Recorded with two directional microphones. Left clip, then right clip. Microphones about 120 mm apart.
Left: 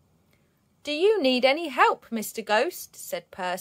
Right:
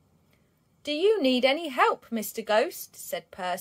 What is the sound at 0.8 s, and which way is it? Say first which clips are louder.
Speech: left 2 dB; 35° left (ahead or behind).